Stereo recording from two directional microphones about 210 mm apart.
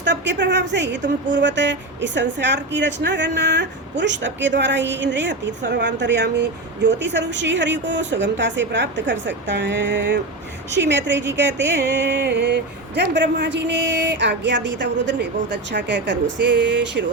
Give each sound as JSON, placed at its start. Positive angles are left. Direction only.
{"t": 0.0, "sound": "a woman's voice", "side_deg": -55}